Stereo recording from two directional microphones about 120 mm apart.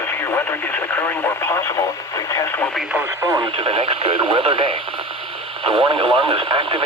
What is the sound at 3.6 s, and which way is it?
Speech, 50° right (ahead or behind).